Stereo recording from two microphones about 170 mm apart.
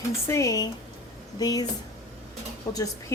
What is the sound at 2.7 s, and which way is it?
Speech, 20° left (ahead or behind).